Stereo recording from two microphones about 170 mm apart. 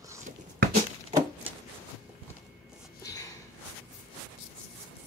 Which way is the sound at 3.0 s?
20° left (ahead or behind).